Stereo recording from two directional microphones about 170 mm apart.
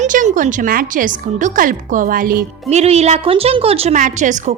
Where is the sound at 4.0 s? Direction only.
50° right (ahead or behind).